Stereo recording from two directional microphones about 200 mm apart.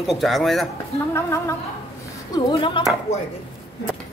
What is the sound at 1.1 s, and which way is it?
A woman's voice, 15° left (ahead or behind).